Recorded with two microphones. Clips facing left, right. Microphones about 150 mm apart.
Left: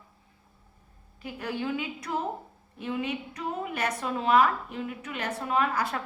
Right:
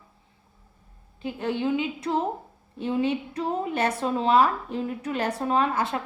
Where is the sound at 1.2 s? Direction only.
25° right (ahead or behind).